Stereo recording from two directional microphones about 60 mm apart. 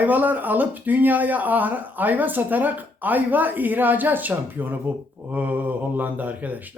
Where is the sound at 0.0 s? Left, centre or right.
Right.